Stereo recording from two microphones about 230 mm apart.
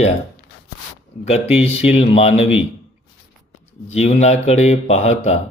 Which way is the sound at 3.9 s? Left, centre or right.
Left.